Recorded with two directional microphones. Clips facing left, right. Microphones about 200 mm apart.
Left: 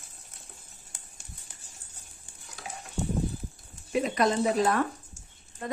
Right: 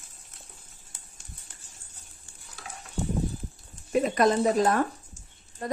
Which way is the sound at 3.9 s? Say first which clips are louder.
Right 3 dB; 45° right (ahead or behind).